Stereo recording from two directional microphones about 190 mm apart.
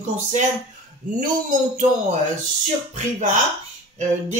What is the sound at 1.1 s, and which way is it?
Speech, 40° right (ahead or behind).